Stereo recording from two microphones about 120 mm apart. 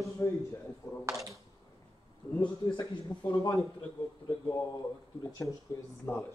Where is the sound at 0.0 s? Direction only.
25° left (ahead or behind).